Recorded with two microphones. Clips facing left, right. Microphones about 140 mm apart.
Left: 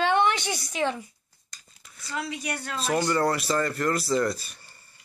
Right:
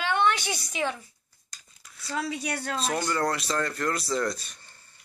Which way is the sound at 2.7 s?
Centre (ahead or behind).